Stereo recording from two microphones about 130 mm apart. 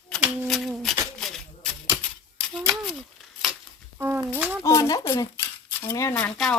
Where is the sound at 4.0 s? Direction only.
15° right (ahead or behind).